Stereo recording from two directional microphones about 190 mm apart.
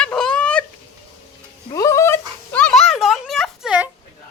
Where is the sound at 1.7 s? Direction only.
15° left (ahead or behind); by 3.9 s 5° right (ahead or behind).